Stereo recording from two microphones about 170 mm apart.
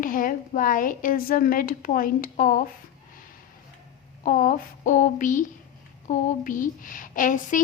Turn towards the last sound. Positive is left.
turn(degrees=50)  # may be behind; listen again after turning